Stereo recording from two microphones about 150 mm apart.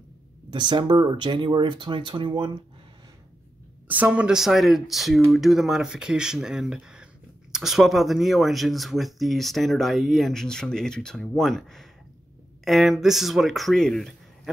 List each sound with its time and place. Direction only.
0.5 s speech: 30° right (ahead or behind)
3.8 s speech: 10° right (ahead or behind)